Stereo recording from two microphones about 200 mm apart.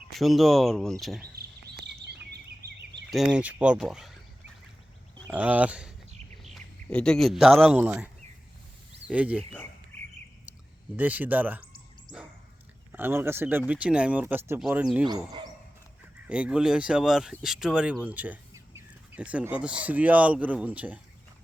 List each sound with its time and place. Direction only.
0.2 s speech: centre (ahead or behind)
1.2 s bird: 50° right (ahead or behind)
3.1 s speech: 5° right (ahead or behind)
5.3 s speech: 5° right (ahead or behind)
10.9 s speech: 10° right (ahead or behind)
12.9 s speech: 10° right (ahead or behind)
15.3 s a sound: 25° right (ahead or behind)
16.2 s speech: 5° right (ahead or behind)